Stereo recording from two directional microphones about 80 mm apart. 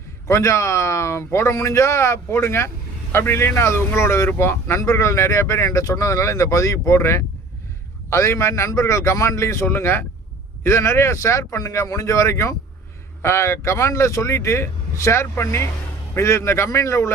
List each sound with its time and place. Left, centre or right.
0.3 s speech: left